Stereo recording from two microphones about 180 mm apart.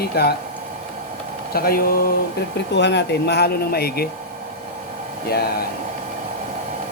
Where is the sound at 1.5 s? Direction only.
55° left (ahead or behind).